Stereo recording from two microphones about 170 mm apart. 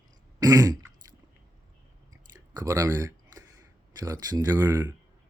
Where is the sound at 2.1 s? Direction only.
20° right (ahead or behind).